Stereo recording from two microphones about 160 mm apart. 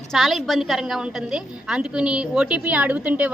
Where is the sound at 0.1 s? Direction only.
Centre (ahead or behind).